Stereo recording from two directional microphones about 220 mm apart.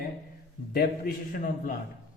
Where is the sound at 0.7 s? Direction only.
45° left (ahead or behind).